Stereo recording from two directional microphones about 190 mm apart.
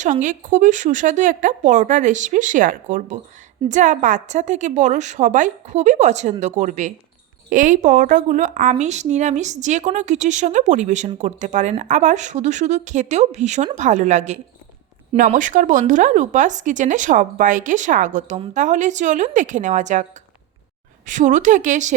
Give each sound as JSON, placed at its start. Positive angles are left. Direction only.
{"t": 0.0, "sound": "a woman's voice", "side_deg": -40}